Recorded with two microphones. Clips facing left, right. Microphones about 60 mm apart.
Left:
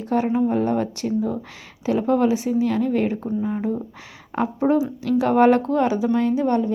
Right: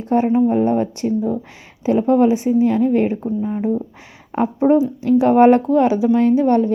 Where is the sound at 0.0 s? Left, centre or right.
Right.